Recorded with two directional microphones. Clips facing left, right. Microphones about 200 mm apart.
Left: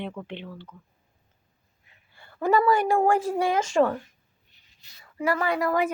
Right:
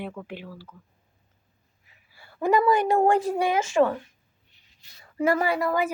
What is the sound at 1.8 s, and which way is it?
A woman's voice, 5° right (ahead or behind).